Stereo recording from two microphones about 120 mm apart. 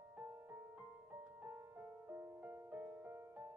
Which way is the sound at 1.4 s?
15° right (ahead or behind).